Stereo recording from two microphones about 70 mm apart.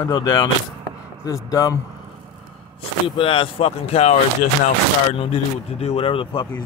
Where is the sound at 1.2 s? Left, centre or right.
Left.